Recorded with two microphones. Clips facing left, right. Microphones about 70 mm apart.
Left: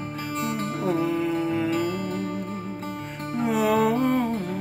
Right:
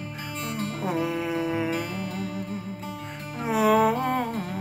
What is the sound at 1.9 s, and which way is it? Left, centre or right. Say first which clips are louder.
Music: left 4 dB; left.